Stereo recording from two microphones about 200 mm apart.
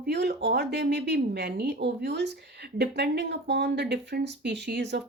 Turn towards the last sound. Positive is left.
turn(degrees=-55)  # may be behind; listen again after turning